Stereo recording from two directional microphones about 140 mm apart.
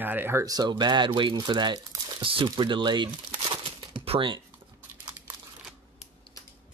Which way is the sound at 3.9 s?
40° right (ahead or behind).